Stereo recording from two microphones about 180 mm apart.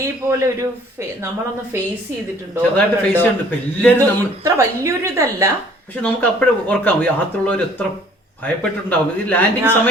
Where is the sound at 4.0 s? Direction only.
15° right (ahead or behind).